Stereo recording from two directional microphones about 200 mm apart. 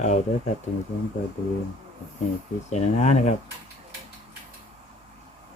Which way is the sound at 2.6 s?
35° left (ahead or behind).